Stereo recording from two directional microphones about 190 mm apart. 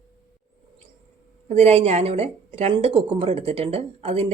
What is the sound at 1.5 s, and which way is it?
A woman's voice, 35° right (ahead or behind).